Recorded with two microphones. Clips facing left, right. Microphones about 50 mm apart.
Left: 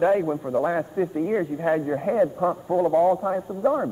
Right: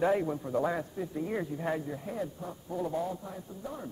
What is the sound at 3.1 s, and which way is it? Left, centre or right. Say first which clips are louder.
Speech: left 17 dB; left.